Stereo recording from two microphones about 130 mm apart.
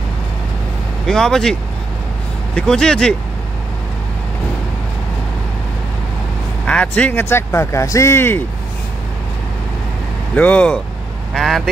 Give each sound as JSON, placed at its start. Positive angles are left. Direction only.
{"t": 1.0, "sound": "speech", "side_deg": 5}
{"t": 6.6, "sound": "speech", "side_deg": 10}
{"t": 10.3, "sound": "speech", "side_deg": 10}